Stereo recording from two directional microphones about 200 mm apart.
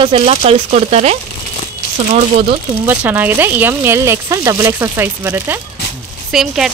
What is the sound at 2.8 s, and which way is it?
Speech, 10° right (ahead or behind).